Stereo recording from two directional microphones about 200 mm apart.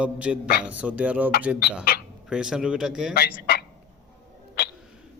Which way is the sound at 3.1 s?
50° left (ahead or behind).